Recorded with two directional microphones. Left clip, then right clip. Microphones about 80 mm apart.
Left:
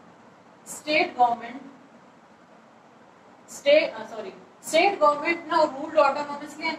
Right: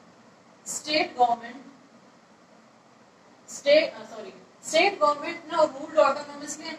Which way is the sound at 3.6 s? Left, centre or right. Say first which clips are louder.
Left 1 dB; right.